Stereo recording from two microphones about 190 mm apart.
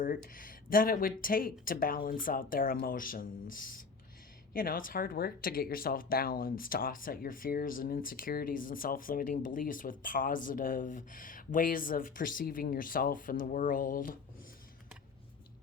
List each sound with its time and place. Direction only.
0.0 s speech: 45° left (ahead or behind)